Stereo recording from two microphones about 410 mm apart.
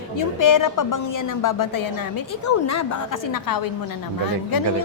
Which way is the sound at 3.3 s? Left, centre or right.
Left.